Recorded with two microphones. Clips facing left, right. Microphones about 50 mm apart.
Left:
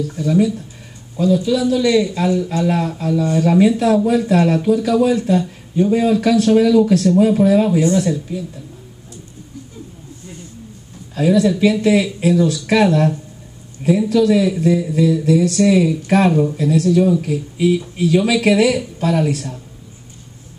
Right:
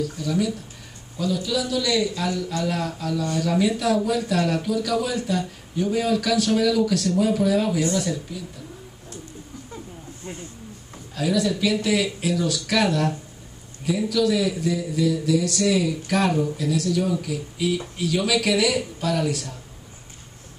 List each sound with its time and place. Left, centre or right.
0.0 s a man's voice: left
11.1 s a man's voice: left